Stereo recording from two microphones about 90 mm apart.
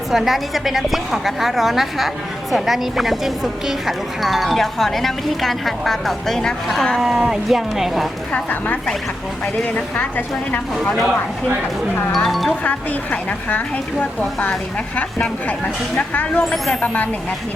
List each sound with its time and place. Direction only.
0.1 s a woman's voice: centre (ahead or behind)
8.3 s speech: 15° left (ahead or behind)
10.8 s a woman's voice: 5° left (ahead or behind)
12.6 s speech: 15° left (ahead or behind)